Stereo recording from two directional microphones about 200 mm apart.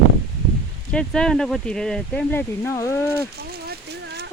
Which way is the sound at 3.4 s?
50° right (ahead or behind).